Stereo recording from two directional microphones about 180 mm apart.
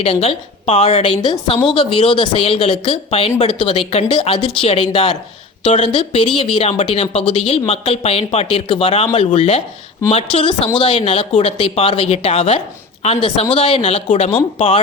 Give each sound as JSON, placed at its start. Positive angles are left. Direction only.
{"t": 0.0, "sound": "a woman's voice", "side_deg": 35}